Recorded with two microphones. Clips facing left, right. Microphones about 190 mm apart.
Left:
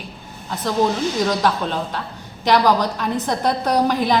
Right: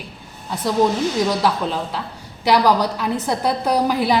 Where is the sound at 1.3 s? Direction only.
5° right (ahead or behind).